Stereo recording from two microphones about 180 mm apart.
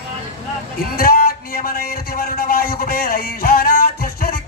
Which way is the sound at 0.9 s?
55° left (ahead or behind).